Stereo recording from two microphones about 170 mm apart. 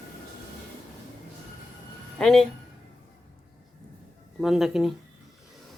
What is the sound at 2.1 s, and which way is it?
Speech, 5° left (ahead or behind).